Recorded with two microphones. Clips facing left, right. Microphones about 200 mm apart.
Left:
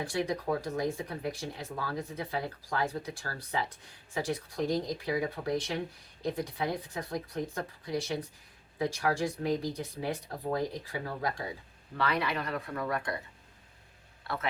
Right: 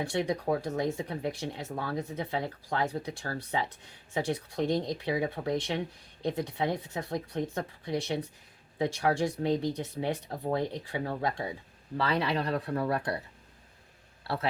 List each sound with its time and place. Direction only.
0.1 s speech: 30° right (ahead or behind)
14.3 s a man's voice: 35° right (ahead or behind)